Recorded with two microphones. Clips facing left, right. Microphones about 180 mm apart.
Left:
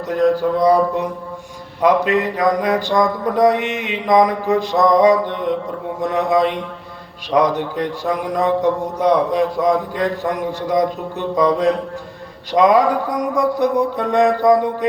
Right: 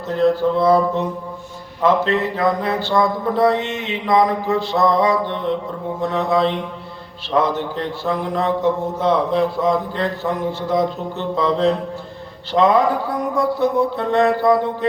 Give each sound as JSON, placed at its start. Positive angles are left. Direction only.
{"t": 0.1, "sound": "speech", "side_deg": 15}